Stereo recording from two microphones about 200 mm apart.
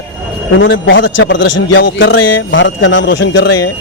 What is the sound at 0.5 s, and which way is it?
A man's voice, 70° left (ahead or behind).